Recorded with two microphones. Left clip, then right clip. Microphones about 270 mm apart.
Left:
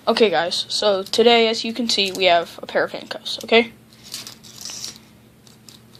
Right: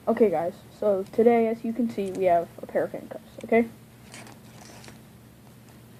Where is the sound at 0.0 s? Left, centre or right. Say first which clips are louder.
Left 6 dB; left.